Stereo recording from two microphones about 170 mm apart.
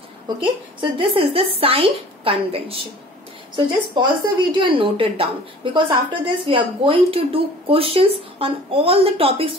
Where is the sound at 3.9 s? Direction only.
30° right (ahead or behind).